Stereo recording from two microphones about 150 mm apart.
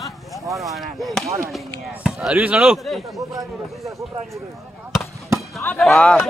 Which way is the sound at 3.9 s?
20° right (ahead or behind).